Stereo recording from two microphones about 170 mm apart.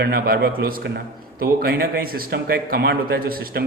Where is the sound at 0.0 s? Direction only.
65° right (ahead or behind).